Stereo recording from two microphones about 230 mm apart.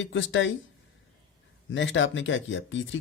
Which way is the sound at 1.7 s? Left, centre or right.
Left.